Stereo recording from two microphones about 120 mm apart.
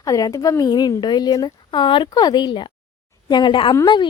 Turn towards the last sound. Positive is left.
turn(degrees=40)  # may be behind; listen again after turning